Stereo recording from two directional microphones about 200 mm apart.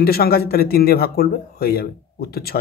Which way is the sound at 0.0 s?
50° left (ahead or behind).